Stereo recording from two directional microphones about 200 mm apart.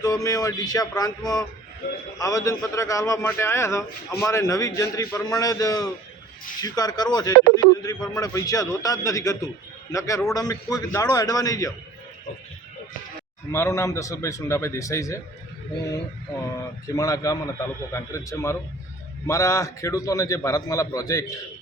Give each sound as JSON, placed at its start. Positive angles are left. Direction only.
{"t": 0.0, "sound": "a man's voice", "side_deg": 15}
{"t": 13.5, "sound": "a man's voice", "side_deg": 15}
{"t": 16.4, "sound": "a man's voice", "side_deg": 15}